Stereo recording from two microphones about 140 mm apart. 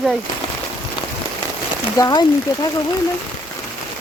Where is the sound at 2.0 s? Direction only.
30° left (ahead or behind).